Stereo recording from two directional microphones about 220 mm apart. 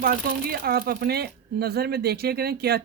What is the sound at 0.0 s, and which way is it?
Speech, 40° right (ahead or behind).